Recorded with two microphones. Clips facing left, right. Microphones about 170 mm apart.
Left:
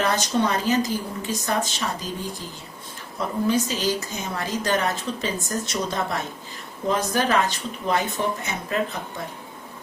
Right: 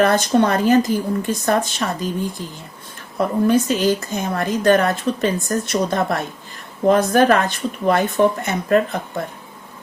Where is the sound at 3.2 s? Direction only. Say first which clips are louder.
Right 6 dB; 55° right (ahead or behind).